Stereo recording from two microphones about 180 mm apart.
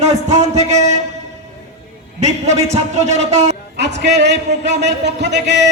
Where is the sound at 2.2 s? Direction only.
40° right (ahead or behind).